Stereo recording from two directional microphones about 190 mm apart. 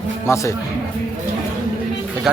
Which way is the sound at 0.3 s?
15° left (ahead or behind).